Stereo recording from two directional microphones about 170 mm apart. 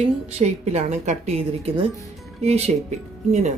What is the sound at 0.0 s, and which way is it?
A woman's voice, 40° right (ahead or behind).